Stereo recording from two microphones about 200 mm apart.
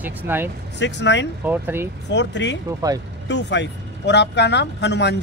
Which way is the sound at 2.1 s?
60° left (ahead or behind).